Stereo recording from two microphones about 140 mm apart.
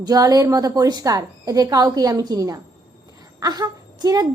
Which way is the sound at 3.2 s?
25° right (ahead or behind).